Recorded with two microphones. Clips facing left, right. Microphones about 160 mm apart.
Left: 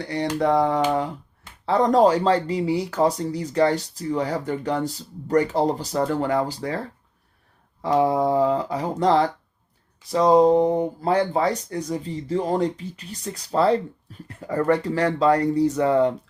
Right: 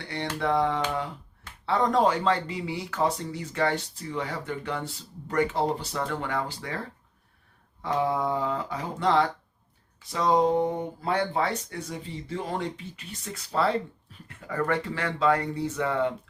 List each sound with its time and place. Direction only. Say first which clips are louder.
0.0 s speech: left 7 dB; 40° left (ahead or behind)
7.9 s speech: left 7 dB; 35° left (ahead or behind)